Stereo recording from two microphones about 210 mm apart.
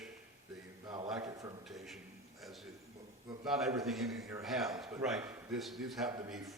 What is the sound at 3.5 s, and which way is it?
A man's voice, centre (ahead or behind).